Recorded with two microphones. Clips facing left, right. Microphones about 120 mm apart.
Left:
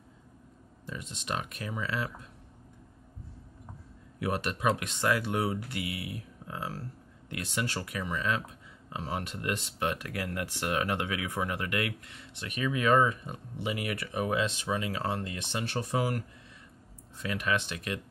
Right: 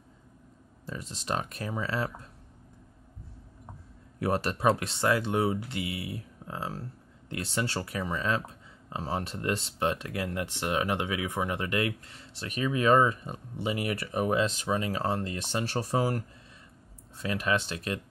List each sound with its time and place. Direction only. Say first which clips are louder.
0.8 s speech: right 3 dB; 35° right (ahead or behind)
4.2 s speech: right 3 dB; 35° right (ahead or behind)